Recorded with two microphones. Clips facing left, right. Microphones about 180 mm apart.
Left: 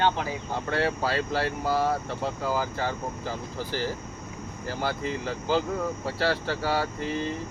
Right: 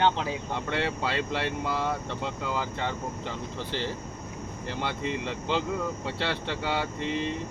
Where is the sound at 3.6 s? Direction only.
25° right (ahead or behind).